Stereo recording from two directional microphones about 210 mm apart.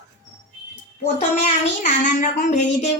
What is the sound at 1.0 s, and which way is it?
A child's voice, 30° left (ahead or behind).